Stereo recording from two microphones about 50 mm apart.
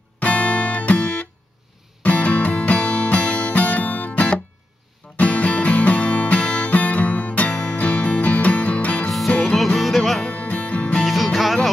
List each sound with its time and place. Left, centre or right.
0.2 s music: left
9.8 s music: centre
10.3 s music: left
11.0 s music: centre